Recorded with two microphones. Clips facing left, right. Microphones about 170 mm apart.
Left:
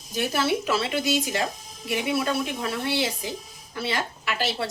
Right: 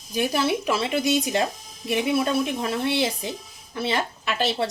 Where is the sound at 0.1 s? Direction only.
15° right (ahead or behind).